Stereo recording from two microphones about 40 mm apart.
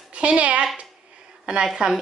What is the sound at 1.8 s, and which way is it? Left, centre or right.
Speech, right.